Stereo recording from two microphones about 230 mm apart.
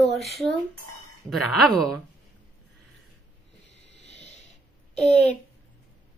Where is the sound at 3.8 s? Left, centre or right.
Right.